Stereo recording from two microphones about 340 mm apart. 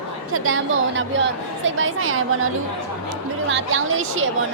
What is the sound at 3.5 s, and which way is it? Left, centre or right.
Speech, right.